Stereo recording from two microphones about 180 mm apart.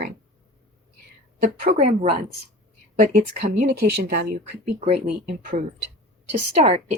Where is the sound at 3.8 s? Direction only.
65° right (ahead or behind).